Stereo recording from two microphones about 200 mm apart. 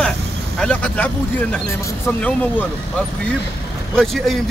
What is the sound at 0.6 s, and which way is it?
Speech, 5° left (ahead or behind).